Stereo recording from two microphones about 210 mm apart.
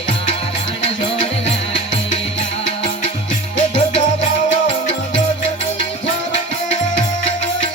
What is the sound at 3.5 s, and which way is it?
Music, 35° left (ahead or behind).